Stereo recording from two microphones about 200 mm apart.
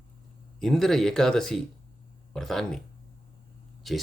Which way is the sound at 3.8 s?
Centre (ahead or behind).